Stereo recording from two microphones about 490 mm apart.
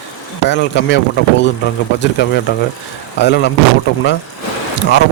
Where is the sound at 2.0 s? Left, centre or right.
Left.